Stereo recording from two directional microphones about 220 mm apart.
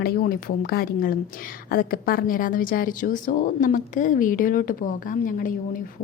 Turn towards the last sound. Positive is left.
turn(degrees=40)  # may be behind; listen again after turning